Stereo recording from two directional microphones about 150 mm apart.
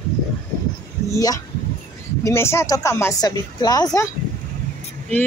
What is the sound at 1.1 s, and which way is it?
Speech, 25° left (ahead or behind).